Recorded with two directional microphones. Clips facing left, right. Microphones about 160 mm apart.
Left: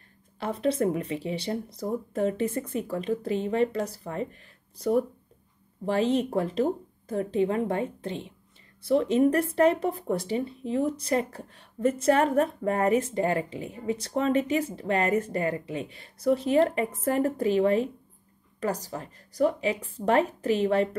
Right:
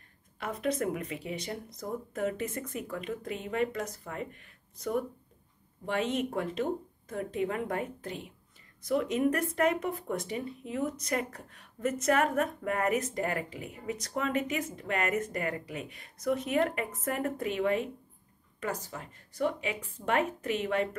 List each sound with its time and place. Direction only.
0.4 s speech: 30° left (ahead or behind)